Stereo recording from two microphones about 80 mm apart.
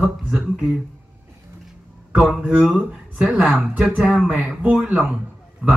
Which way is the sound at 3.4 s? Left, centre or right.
Centre.